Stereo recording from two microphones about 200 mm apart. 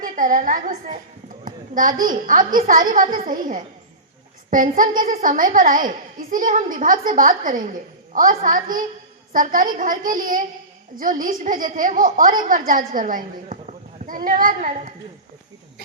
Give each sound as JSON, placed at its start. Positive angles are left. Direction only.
{"t": 0.0, "sound": "a woman's voice", "side_deg": -40}